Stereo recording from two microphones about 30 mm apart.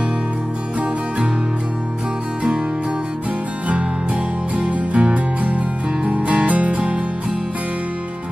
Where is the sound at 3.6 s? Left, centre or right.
Right.